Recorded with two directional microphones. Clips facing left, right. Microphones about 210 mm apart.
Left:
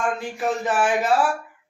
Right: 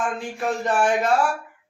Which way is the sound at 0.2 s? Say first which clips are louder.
Left 1 dB; 5° left (ahead or behind).